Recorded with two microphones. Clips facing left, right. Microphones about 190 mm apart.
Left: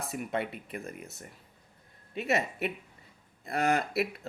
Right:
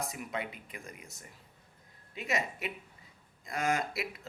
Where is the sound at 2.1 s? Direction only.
65° left (ahead or behind).